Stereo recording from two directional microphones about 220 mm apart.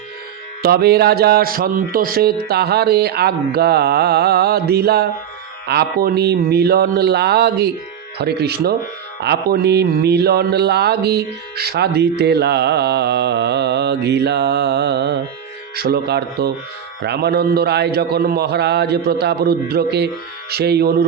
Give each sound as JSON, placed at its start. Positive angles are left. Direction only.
{"t": 0.6, "sound": "speech", "side_deg": -45}